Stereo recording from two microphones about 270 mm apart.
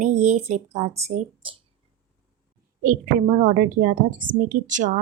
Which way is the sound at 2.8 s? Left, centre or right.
Right.